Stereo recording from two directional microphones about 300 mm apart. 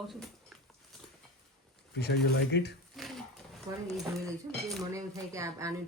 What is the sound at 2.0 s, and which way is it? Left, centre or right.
Speech, left.